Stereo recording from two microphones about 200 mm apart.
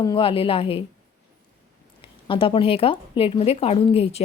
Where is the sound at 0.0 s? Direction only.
20° left (ahead or behind).